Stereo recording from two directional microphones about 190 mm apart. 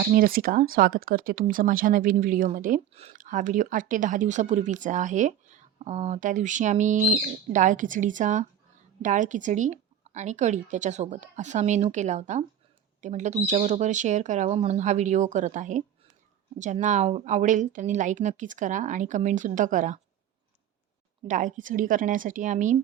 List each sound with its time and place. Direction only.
0.0 s a woman's voice: 50° right (ahead or behind)
21.2 s speech: 40° right (ahead or behind)